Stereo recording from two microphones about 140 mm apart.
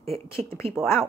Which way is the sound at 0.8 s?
5° right (ahead or behind).